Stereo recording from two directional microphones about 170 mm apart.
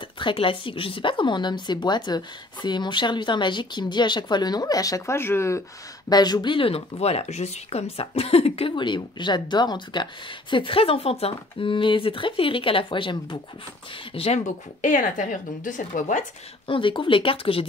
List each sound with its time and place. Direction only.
0.2 s a woman's voice: 30° left (ahead or behind); by 16.3 s 50° left (ahead or behind)
16.6 s speech: 30° left (ahead or behind)